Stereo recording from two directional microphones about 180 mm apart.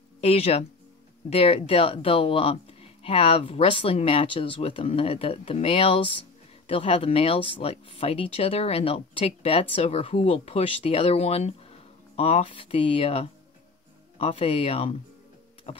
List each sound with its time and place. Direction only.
0.2 s speech: 35° left (ahead or behind)